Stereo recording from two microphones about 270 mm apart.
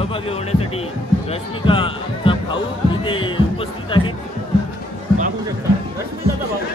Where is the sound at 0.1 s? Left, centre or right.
Left.